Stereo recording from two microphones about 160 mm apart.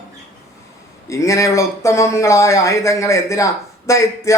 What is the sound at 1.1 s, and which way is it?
A man's voice, 20° left (ahead or behind).